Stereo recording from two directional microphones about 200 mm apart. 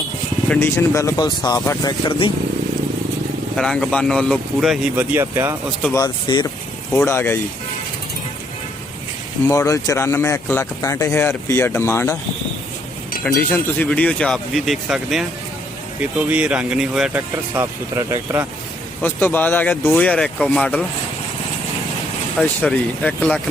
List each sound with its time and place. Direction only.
0.4 s speech: 10° left (ahead or behind); by 2.3 s 25° left (ahead or behind)
3.6 s speech: 5° left (ahead or behind); by 5.5 s 15° right (ahead or behind)
5.8 s speech: 15° left (ahead or behind)
6.9 s speech: 10° left (ahead or behind)
9.5 s speech: 15° left (ahead or behind)
13.2 s speech: 10° left (ahead or behind); by 18.4 s 15° right (ahead or behind)
19.0 s speech: 10° left (ahead or behind)
22.4 s speech: 5° left (ahead or behind)